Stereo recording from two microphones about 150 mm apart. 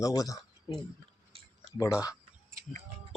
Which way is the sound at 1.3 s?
40° right (ahead or behind).